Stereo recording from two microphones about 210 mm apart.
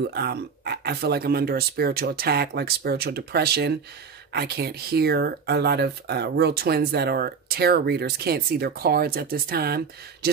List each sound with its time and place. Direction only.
0.1 s speech: 50° right (ahead or behind)